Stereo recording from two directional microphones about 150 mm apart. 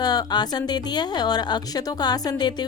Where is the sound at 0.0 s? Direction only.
25° left (ahead or behind).